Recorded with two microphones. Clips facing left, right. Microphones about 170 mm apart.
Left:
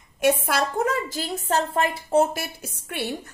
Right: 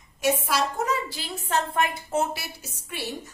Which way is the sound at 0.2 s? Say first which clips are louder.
Left 3 dB; 55° left (ahead or behind).